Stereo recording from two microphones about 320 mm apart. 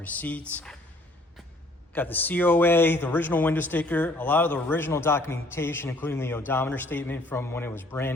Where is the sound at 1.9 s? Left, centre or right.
Centre.